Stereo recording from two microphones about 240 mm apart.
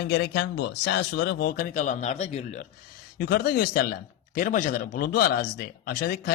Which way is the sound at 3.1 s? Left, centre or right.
Left.